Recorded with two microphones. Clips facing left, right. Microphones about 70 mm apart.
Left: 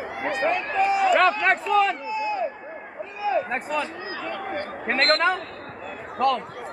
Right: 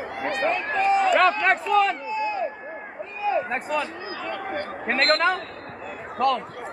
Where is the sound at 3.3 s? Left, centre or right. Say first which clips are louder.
Even; centre.